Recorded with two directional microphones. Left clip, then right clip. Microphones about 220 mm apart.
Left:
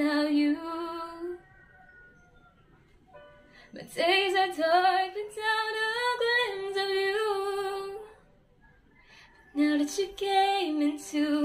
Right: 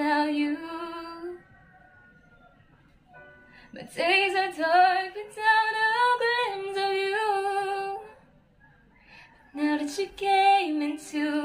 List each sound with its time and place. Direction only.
0.0 s music: 5° right (ahead or behind)
3.5 s female singing: 5° right (ahead or behind)
9.1 s female singing: 5° right (ahead or behind)